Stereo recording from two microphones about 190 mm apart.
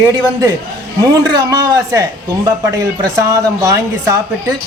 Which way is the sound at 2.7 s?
20° right (ahead or behind).